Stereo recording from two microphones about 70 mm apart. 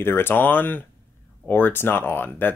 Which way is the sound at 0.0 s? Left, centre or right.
Left.